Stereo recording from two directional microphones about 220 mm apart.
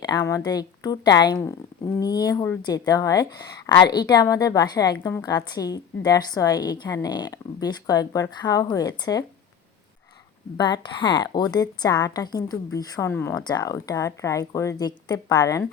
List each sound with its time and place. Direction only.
0.0 s a woman's voice: 15° left (ahead or behind)
10.6 s a woman's voice: 20° left (ahead or behind)